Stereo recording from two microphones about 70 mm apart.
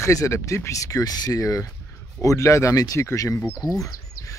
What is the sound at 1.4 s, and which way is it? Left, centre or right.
Speech, left.